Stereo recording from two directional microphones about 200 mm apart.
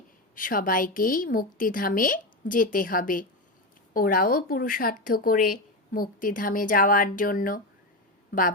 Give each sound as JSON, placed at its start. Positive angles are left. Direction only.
{"t": 0.3, "sound": "speech", "side_deg": 45}